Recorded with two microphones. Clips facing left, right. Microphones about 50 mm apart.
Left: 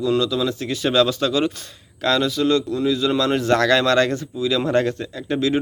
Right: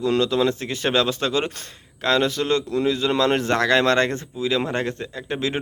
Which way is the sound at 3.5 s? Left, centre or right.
Right.